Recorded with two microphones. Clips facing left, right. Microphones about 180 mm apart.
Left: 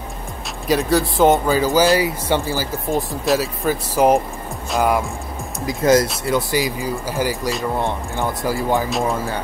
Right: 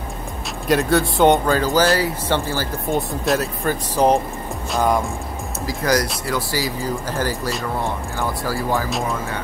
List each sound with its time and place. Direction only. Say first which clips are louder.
0.7 s speech: even; centre (ahead or behind)
2.9 s speech: left 1 dB; centre (ahead or behind)
5.7 s speech: left 5 dB; 25° left (ahead or behind)